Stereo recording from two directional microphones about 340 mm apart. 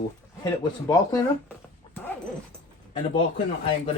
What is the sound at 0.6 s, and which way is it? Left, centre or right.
Speech, centre.